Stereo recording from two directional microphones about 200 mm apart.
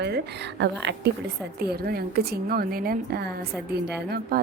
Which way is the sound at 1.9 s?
50° right (ahead or behind).